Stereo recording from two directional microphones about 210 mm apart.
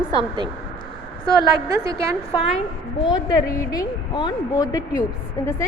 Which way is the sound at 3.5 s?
20° left (ahead or behind).